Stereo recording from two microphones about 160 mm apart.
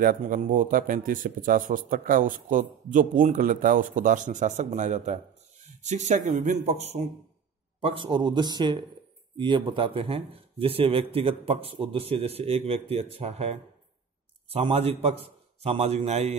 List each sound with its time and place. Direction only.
0.0 s a man's voice: 60° right (ahead or behind); by 16.3 s 40° right (ahead or behind)